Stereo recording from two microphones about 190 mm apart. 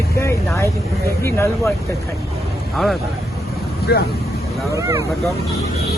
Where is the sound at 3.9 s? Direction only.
55° left (ahead or behind).